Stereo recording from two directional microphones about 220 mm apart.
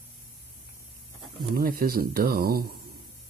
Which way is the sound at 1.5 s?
40° right (ahead or behind).